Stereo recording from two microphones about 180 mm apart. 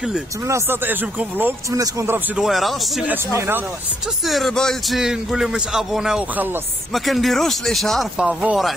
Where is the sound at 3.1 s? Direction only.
10° right (ahead or behind).